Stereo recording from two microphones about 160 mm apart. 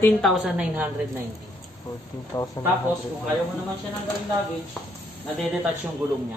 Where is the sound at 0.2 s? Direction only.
5° right (ahead or behind).